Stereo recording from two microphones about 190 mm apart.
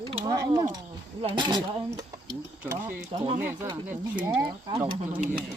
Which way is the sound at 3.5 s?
15° right (ahead or behind).